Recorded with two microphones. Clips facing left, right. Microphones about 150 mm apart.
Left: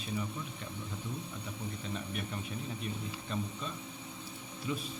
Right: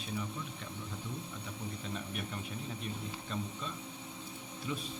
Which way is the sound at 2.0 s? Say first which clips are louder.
Left 1 dB; centre (ahead or behind).